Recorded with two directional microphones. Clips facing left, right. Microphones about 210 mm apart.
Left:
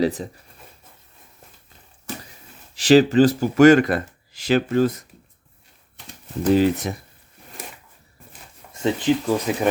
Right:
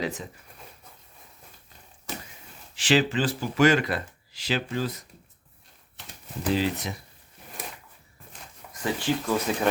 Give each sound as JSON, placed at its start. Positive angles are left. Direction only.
{"t": 0.0, "sound": "speech", "side_deg": 35}
{"t": 2.7, "sound": "speech", "side_deg": 40}
{"t": 6.5, "sound": "speech", "side_deg": 50}
{"t": 8.7, "sound": "speech", "side_deg": 20}